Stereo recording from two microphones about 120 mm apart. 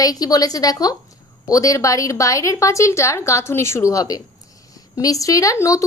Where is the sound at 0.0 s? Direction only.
30° left (ahead or behind).